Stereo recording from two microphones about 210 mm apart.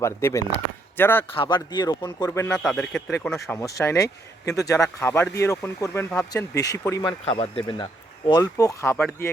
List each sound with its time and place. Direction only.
0.0 s a man's voice: 10° left (ahead or behind)
1.3 s speech: 25° left (ahead or behind)